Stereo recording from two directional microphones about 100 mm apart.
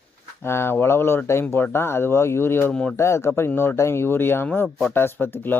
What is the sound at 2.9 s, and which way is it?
Speech, 25° left (ahead or behind).